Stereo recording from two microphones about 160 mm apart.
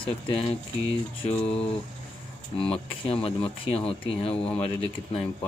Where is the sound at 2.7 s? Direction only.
35° left (ahead or behind).